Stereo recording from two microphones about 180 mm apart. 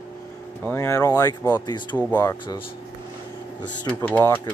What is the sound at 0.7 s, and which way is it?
Speech, 15° left (ahead or behind).